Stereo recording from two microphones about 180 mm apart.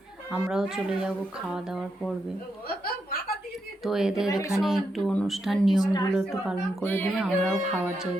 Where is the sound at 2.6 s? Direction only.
55° left (ahead or behind).